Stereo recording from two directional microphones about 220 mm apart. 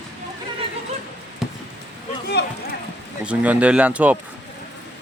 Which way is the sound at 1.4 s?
Centre (ahead or behind).